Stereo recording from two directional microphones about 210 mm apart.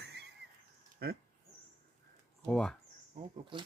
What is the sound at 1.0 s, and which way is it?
Speech, 50° right (ahead or behind).